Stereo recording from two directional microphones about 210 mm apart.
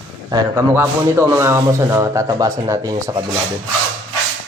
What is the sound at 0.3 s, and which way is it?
A man's voice, 15° right (ahead or behind).